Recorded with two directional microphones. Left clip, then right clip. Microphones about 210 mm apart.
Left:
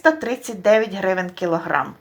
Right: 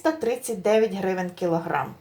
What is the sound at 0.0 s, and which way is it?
A woman's voice, 20° left (ahead or behind).